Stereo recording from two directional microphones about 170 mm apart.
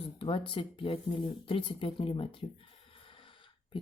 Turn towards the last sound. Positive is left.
turn(degrees=30)  # may be behind; listen again after turning